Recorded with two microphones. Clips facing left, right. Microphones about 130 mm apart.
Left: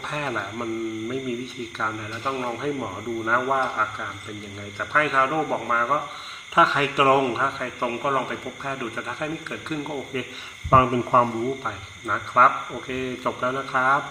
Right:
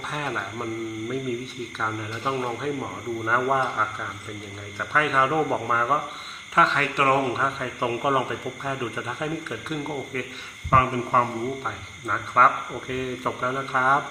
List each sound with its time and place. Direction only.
0.1 s a man's voice: centre (ahead or behind)
1.8 s a man's voice: centre (ahead or behind)
6.6 s a man's voice: 10° left (ahead or behind)
7.8 s speech: 10° right (ahead or behind)
10.7 s speech: 20° left (ahead or behind)
11.6 s a man's voice: centre (ahead or behind)